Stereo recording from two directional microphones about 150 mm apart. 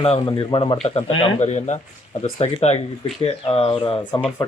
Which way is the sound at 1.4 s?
50° left (ahead or behind).